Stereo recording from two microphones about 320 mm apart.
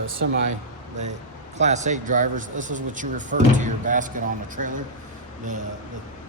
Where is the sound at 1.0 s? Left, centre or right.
Right.